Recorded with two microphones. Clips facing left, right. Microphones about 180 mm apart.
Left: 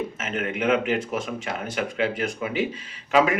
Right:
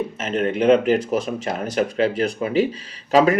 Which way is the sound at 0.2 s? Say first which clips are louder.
Right 9 dB; 35° right (ahead or behind).